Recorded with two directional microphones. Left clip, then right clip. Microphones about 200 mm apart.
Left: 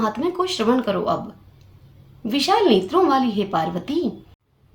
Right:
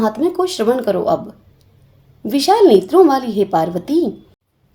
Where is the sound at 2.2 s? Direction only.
45° right (ahead or behind).